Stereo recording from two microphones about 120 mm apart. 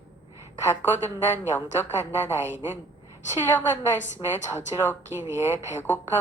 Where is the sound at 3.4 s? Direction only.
15° left (ahead or behind).